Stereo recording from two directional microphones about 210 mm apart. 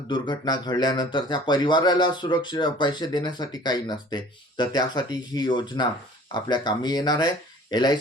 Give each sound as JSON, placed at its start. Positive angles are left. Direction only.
{"t": 0.1, "sound": "speech", "side_deg": 20}